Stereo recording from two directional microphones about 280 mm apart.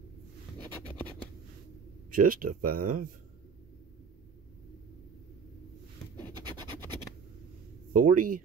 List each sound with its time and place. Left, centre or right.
2.0 s speech: right
7.9 s speech: right